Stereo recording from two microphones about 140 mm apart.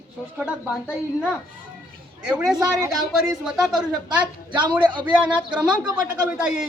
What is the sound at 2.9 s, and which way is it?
Speech, centre (ahead or behind).